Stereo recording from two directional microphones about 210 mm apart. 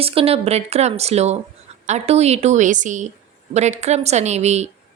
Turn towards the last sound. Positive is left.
turn(degrees=-30)  # may be behind; listen again after turning